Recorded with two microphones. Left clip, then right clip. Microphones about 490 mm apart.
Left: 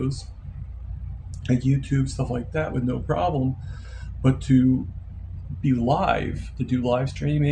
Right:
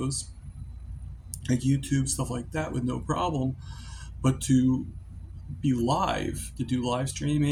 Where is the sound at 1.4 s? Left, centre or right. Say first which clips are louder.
Left 3 dB; right.